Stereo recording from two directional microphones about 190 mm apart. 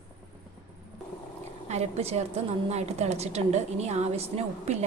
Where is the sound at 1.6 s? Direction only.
35° right (ahead or behind).